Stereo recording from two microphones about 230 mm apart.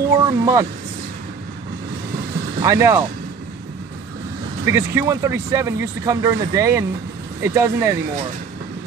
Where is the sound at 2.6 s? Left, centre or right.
Centre.